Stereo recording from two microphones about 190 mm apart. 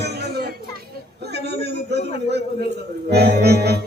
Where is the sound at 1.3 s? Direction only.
60° right (ahead or behind).